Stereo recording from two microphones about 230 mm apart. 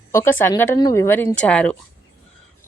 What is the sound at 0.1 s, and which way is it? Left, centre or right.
A woman's voice, centre.